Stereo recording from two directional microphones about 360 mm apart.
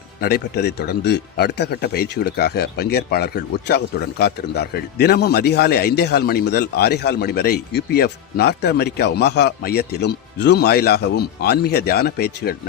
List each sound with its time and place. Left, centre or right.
0.2 s speech: left